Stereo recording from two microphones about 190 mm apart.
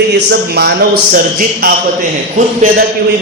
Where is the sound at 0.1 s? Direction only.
60° right (ahead or behind).